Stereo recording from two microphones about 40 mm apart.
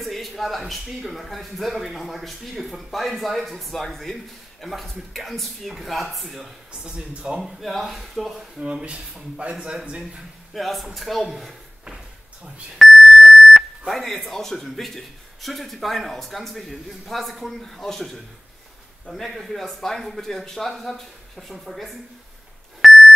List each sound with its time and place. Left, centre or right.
0.0 s a sound: centre
0.3 s speech: centre
6.8 s speech: right
7.6 s speech: centre
8.8 s speech: right
10.5 s speech: centre
12.7 s speech: centre
19.2 s speech: centre
19.6 s speech: centre
22.8 s beep: centre